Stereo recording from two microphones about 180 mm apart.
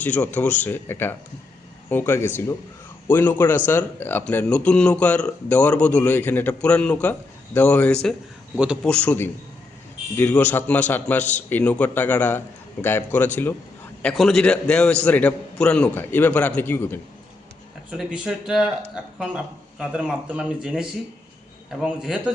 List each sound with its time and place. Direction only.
0.0 s speech: 10° left (ahead or behind)
8.5 s speech: 5° right (ahead or behind); by 17.0 s 10° left (ahead or behind)
17.9 s speech: 5° right (ahead or behind)
19.8 s speech: 5° right (ahead or behind)